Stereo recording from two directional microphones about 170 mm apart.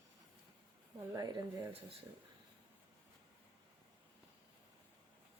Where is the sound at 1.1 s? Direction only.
15° right (ahead or behind).